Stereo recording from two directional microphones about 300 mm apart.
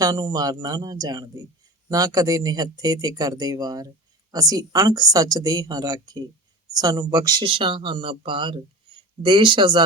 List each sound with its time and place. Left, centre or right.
0.0 s speech: centre